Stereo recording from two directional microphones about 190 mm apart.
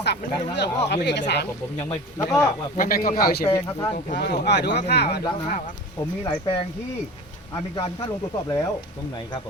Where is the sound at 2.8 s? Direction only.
50° left (ahead or behind).